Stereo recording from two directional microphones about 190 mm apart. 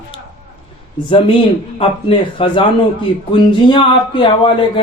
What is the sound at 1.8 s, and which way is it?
Speech, 30° left (ahead or behind).